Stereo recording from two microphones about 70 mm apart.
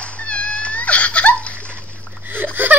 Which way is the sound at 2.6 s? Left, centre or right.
Right.